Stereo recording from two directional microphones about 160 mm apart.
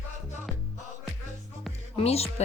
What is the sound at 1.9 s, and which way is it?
Speech, 40° left (ahead or behind).